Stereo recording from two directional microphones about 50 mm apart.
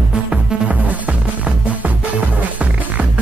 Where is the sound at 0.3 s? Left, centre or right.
Right.